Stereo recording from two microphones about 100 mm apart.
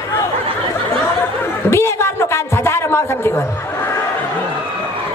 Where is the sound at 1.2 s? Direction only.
25° left (ahead or behind).